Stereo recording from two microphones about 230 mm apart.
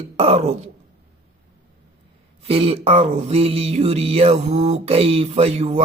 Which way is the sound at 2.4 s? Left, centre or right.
Right.